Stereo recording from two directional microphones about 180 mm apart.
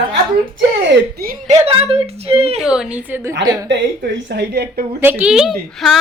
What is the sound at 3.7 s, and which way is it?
A woman's voice, 75° right (ahead or behind).